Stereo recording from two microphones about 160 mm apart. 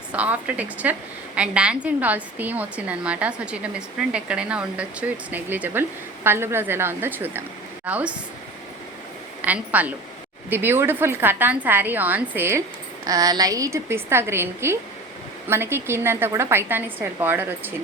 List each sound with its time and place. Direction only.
0.1 s a woman's voice: 10° right (ahead or behind)
9.4 s a woman's voice: 10° right (ahead or behind)